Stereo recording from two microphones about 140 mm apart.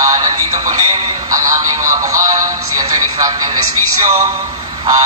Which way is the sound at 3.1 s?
30° right (ahead or behind).